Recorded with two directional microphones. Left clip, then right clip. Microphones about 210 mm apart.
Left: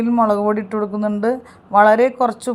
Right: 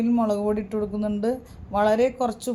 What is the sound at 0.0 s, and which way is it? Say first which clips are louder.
Speech: left 7 dB; 5° left (ahead or behind).